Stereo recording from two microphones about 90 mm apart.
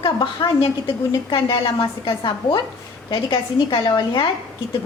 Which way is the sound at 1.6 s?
65° left (ahead or behind).